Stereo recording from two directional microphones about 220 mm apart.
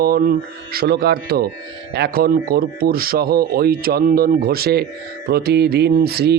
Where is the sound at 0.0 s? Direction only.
45° right (ahead or behind).